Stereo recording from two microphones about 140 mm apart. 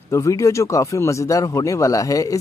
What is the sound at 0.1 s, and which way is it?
Speech, 20° left (ahead or behind).